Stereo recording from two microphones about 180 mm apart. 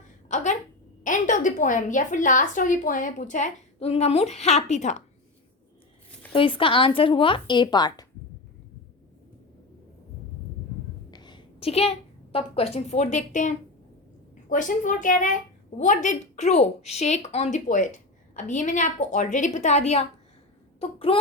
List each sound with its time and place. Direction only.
0.3 s a woman's voice: 45° left (ahead or behind)
6.3 s speech: 30° left (ahead or behind)
11.1 s a woman's voice: 25° left (ahead or behind)